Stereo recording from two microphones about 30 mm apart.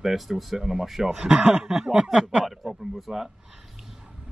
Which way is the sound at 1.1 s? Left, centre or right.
Right.